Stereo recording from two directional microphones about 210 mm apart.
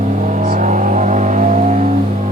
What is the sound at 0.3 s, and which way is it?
Vehicle, 35° right (ahead or behind).